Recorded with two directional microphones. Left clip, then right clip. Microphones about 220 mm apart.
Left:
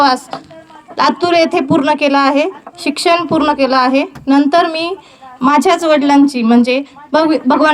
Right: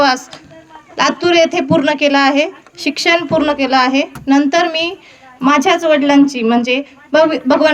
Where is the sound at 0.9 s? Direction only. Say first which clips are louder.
Left 1 dB; 15° left (ahead or behind).